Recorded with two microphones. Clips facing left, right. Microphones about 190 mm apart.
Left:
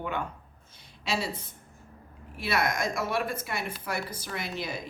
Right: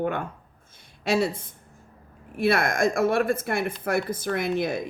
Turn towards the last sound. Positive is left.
turn(degrees=-55)  # may be behind; listen again after turning